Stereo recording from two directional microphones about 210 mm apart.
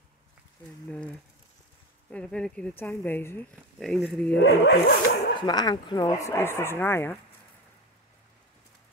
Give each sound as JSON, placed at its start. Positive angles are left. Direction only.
{"t": 0.8, "sound": "speech", "side_deg": 5}
{"t": 4.4, "sound": "speech", "side_deg": 55}
{"t": 5.3, "sound": "speech", "side_deg": 20}